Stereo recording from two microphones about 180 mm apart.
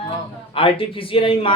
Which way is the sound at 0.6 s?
30° left (ahead or behind).